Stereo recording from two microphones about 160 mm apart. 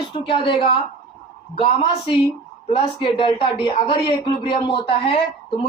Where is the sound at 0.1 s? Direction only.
35° left (ahead or behind).